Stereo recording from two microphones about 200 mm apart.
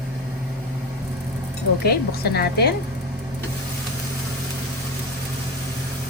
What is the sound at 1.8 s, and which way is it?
Speech, 50° left (ahead or behind).